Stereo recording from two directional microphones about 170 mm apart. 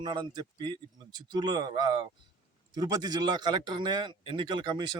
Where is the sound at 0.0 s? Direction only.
25° right (ahead or behind).